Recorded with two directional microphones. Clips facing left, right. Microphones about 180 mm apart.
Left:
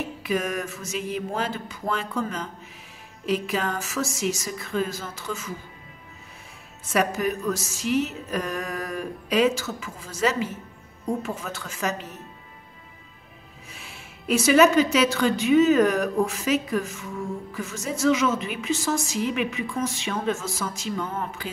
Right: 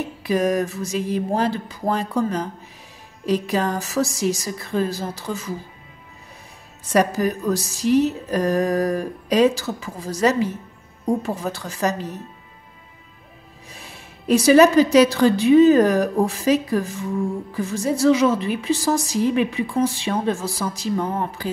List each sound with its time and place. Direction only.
0.2 s a woman's voice: 35° right (ahead or behind)
6.9 s a woman's voice: 35° right (ahead or behind)
13.7 s a woman's voice: 35° right (ahead or behind)